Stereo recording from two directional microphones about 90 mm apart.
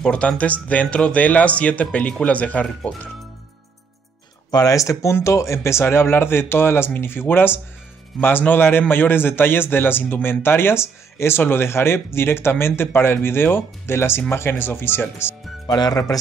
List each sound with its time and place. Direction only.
0.0 s speech: 10° left (ahead or behind)
4.5 s a man's voice: 40° left (ahead or behind); by 15.3 s 25° left (ahead or behind)
15.6 s speech: 50° left (ahead or behind)